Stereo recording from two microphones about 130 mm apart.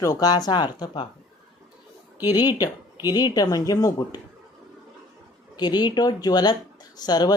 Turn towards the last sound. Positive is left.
turn(degrees=30)  # may be behind; listen again after turning